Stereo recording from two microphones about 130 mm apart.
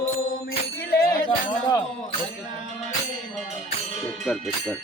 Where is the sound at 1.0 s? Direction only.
90° left.